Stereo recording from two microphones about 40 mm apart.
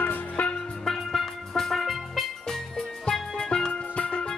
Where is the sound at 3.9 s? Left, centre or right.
Left.